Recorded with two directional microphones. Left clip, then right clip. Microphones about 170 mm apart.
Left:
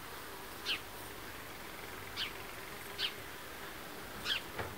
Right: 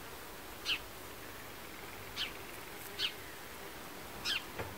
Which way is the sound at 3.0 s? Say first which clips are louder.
Right 1 dB; 60° right (ahead or behind).